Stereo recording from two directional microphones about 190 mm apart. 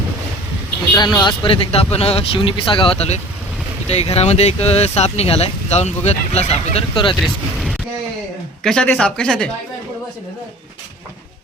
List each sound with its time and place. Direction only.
0.9 s speech: 20° left (ahead or behind)
7.2 s speech: centre (ahead or behind)